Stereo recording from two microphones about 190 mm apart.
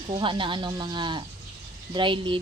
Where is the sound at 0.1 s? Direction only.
25° right (ahead or behind).